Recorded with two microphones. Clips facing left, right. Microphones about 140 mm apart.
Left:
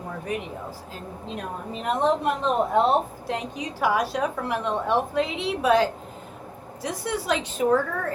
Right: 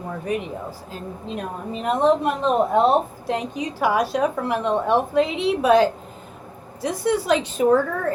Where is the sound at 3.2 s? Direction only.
20° right (ahead or behind).